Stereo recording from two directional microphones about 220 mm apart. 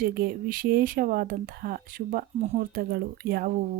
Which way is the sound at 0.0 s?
45° right (ahead or behind).